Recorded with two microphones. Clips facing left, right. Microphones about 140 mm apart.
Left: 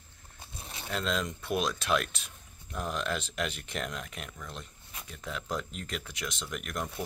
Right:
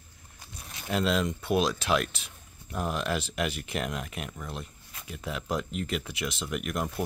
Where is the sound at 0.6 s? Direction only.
30° left (ahead or behind).